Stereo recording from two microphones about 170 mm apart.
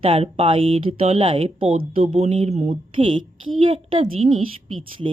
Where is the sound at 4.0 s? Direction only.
40° right (ahead or behind).